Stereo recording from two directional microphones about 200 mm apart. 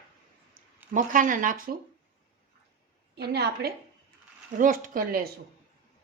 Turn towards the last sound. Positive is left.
turn(degrees=-45)  # may be behind; listen again after turning